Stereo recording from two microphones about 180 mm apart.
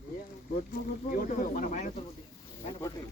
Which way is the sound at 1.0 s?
50° left (ahead or behind).